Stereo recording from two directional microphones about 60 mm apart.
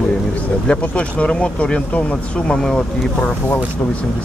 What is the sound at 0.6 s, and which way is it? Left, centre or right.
Speech, centre.